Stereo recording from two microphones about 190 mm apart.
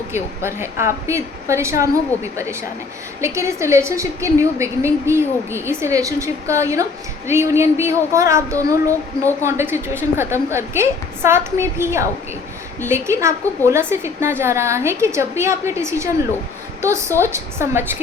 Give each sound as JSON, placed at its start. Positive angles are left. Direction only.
{"t": 0.1, "sound": "a woman's voice", "side_deg": -15}